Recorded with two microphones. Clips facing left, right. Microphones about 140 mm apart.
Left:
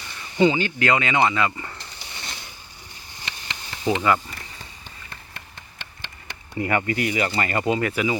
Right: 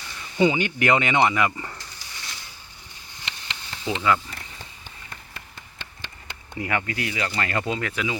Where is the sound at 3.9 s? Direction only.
45° left (ahead or behind).